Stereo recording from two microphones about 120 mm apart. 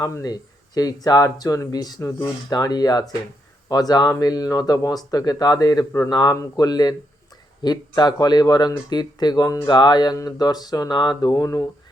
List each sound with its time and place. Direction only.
0.0 s speech: 30° left (ahead or behind)